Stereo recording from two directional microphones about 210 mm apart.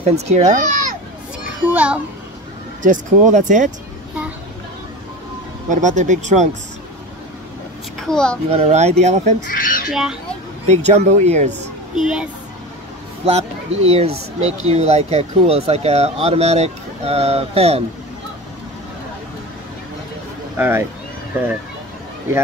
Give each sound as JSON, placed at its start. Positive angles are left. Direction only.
{"t": 0.0, "sound": "speech", "side_deg": -30}
{"t": 1.6, "sound": "a child's voice", "side_deg": -10}
{"t": 2.8, "sound": "speech", "side_deg": -35}
{"t": 5.7, "sound": "speech", "side_deg": -35}
{"t": 8.1, "sound": "a child's voice", "side_deg": 5}
{"t": 8.5, "sound": "speech", "side_deg": -30}
{"t": 9.5, "sound": "squawk", "side_deg": 40}
{"t": 10.7, "sound": "speech", "side_deg": -30}
{"t": 12.0, "sound": "a child's voice", "side_deg": -5}
{"t": 13.2, "sound": "speech", "side_deg": -30}
{"t": 20.5, "sound": "speech", "side_deg": -10}